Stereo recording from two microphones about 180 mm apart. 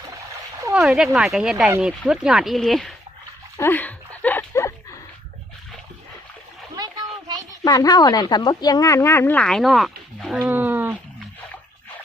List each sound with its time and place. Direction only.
0.7 s speech: centre (ahead or behind)
3.6 s a sound: 10° left (ahead or behind)
7.6 s a woman's voice: 20° left (ahead or behind); by 9.9 s centre (ahead or behind)
10.3 s dog: 10° right (ahead or behind)